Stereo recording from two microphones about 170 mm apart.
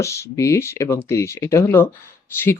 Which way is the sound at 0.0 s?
15° left (ahead or behind).